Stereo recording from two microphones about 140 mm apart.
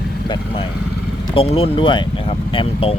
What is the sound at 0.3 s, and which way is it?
Speech, 40° left (ahead or behind).